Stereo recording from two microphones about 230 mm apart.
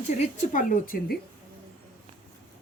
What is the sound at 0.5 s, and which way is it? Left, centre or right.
Speech, left.